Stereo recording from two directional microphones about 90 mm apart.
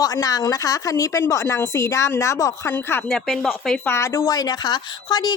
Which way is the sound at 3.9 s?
30° left (ahead or behind).